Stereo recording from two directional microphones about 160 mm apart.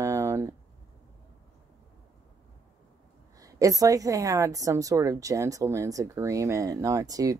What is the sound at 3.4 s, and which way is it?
Speech, 20° right (ahead or behind).